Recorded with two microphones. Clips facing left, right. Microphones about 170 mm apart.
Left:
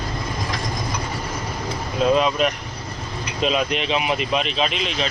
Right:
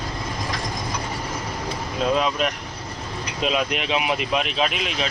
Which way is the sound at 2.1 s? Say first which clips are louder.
Left 3 dB; centre (ahead or behind).